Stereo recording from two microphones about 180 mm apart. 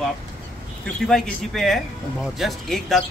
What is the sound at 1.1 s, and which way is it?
Speech, centre (ahead or behind).